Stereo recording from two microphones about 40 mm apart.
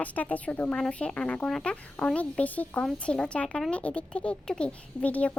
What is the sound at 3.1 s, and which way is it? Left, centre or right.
Speech, left.